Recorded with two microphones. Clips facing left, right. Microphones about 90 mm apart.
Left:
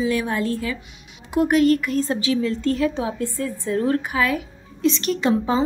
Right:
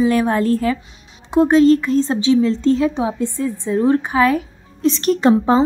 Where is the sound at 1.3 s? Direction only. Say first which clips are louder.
Right 5 dB; 30° right (ahead or behind).